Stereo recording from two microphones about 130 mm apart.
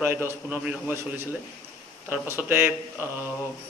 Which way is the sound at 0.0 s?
15° right (ahead or behind).